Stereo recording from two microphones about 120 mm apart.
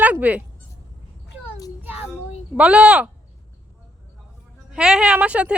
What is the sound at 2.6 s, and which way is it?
Speech, 10° right (ahead or behind).